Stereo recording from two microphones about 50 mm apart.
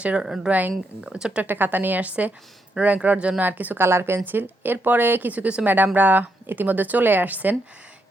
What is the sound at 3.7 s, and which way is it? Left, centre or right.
Speech, right.